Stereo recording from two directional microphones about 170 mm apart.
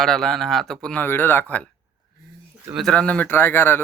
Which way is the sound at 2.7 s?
5° left (ahead or behind).